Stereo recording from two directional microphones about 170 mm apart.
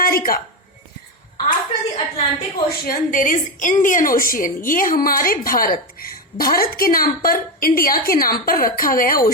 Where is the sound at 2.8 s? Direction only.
50° left (ahead or behind).